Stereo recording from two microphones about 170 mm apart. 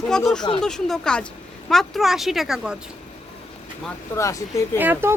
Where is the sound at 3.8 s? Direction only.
15° left (ahead or behind).